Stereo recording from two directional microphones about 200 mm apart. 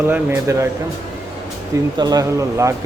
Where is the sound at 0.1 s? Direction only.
15° right (ahead or behind).